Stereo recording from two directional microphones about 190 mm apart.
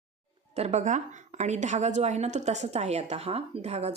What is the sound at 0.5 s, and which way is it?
A woman's voice, 35° right (ahead or behind).